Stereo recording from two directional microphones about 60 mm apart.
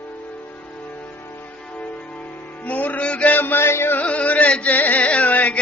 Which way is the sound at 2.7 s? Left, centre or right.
Left.